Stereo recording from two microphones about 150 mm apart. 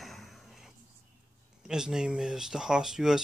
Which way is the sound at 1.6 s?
5° right (ahead or behind).